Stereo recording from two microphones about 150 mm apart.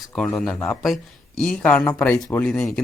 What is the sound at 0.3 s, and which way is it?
A man's voice, 5° left (ahead or behind).